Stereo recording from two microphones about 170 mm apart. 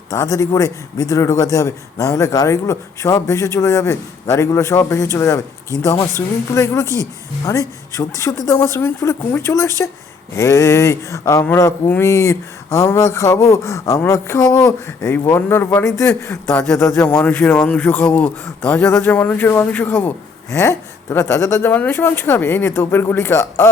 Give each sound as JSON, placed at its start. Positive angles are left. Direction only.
{"t": 0.1, "sound": "a woman's voice", "side_deg": 20}